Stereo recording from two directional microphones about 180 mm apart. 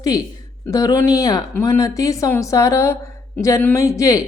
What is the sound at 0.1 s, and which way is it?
Speech, 20° left (ahead or behind).